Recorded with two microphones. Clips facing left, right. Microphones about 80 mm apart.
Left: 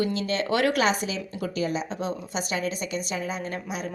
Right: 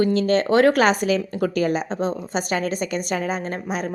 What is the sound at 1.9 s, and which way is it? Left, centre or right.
Speech, right.